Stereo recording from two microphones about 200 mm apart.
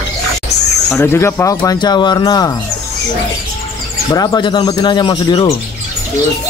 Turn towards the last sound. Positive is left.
turn(degrees=25)  # may be behind; listen again after turning